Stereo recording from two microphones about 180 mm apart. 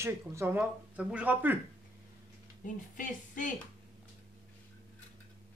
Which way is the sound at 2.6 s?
45° left (ahead or behind).